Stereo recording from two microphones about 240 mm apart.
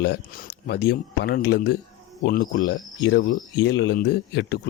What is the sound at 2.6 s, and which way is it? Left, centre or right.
Speech, left.